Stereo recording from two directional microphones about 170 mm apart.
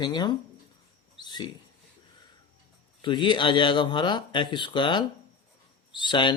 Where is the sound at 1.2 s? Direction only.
25° left (ahead or behind).